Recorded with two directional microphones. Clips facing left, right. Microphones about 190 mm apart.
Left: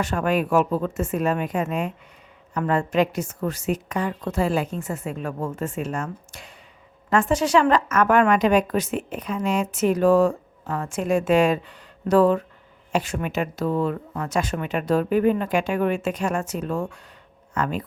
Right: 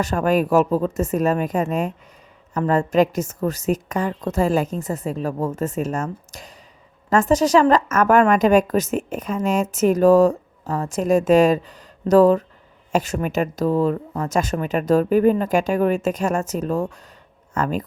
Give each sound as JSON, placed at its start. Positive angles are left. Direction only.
{"t": 0.0, "sound": "a woman's voice", "side_deg": -40}